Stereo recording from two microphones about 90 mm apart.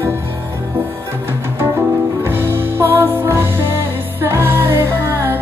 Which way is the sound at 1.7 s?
25° right (ahead or behind).